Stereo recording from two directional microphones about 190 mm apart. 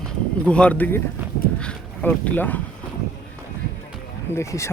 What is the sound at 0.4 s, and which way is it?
Speech, 5° left (ahead or behind).